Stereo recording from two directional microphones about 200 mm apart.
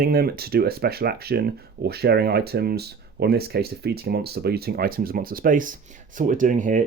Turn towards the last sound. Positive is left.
turn(degrees=-40)  # may be behind; listen again after turning